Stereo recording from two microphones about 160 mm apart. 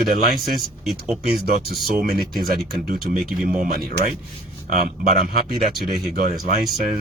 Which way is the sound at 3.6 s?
65° right (ahead or behind).